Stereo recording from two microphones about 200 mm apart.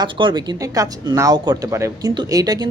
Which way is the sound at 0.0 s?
25° right (ahead or behind).